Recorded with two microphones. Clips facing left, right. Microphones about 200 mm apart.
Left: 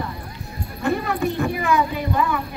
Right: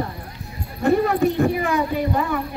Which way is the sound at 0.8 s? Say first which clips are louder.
Right 5 dB; 40° right (ahead or behind).